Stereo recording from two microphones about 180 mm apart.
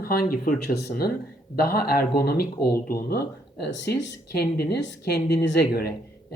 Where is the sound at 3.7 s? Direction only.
85° left.